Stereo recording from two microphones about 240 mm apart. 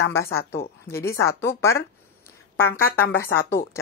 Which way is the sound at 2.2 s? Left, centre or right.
Centre.